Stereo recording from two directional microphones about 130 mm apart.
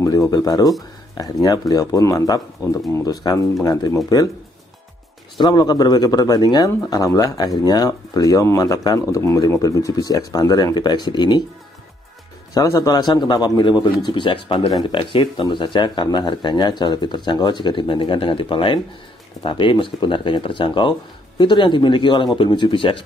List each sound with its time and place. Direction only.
0.0 s speech: 25° left (ahead or behind)
5.4 s speech: 35° left (ahead or behind)
12.5 s speech: 30° left (ahead or behind)